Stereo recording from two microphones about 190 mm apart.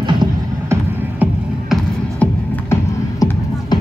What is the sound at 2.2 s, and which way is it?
Music, 15° left (ahead or behind).